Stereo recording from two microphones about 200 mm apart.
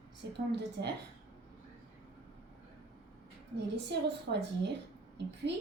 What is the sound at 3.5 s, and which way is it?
A woman's voice, 60° right (ahead or behind).